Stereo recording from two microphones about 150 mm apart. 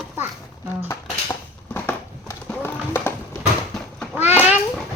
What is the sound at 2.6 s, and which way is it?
Horse, 15° left (ahead or behind).